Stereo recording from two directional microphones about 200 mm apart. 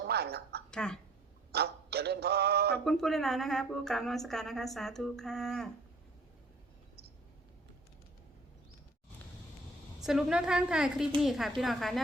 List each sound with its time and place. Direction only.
0.0 s a woman's voice: 55° right (ahead or behind)
0.7 s speech: 5° left (ahead or behind)
1.5 s male singing: 55° right (ahead or behind)
2.8 s a woman's voice: centre (ahead or behind)
10.0 s a woman's voice: 5° right (ahead or behind)